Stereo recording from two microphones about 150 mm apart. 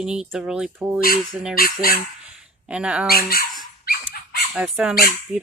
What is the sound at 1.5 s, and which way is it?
Speech, 75° left (ahead or behind).